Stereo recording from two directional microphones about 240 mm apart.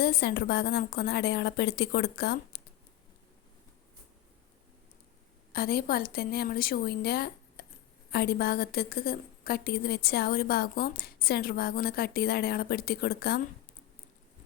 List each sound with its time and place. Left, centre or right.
0.0 s a woman's voice: left
5.5 s a woman's voice: left